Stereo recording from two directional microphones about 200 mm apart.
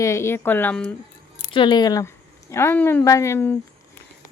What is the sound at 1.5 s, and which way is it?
Speech, 25° left (ahead or behind).